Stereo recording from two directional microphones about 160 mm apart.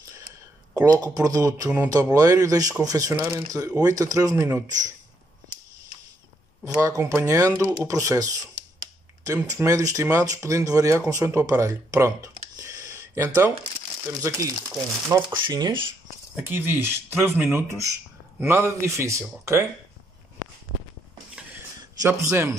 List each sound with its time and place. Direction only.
0.7 s speech: 25° right (ahead or behind)
6.8 s speech: 20° right (ahead or behind)
15.2 s speech: 30° right (ahead or behind)
16.4 s speech: 10° right (ahead or behind)
22.0 s speech: 20° right (ahead or behind)